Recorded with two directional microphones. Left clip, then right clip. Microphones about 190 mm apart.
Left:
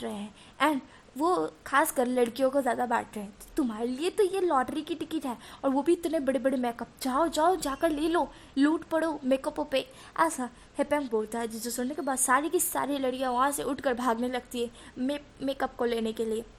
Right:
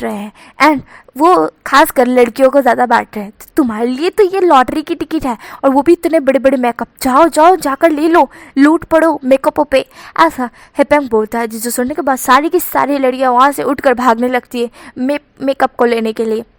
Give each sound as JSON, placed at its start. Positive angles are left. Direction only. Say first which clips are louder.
{"t": 0.0, "sound": "a woman's voice", "louder": "right 17 dB", "side_deg": -20}